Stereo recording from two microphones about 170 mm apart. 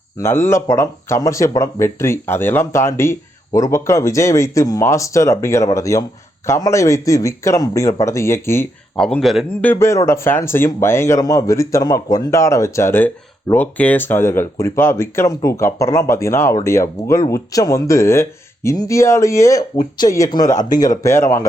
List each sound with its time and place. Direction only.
0.2 s speech: 15° left (ahead or behind)
9.0 s a man's voice: 5° left (ahead or behind)
9.6 s speech: 15° left (ahead or behind)